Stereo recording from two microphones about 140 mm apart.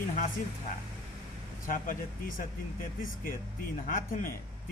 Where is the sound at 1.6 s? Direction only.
70° left (ahead or behind).